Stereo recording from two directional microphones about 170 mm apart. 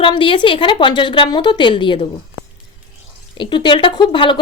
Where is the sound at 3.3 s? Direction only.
30° left (ahead or behind).